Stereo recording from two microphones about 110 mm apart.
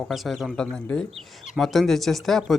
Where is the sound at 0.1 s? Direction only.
Centre (ahead or behind).